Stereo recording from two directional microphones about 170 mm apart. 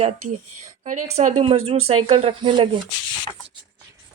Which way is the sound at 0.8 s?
50° right (ahead or behind).